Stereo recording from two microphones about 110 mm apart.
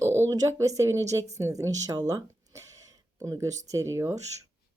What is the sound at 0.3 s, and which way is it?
Speech, 30° right (ahead or behind).